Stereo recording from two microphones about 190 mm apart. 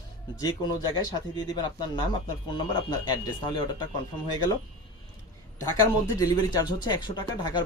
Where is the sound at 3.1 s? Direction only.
25° left (ahead or behind).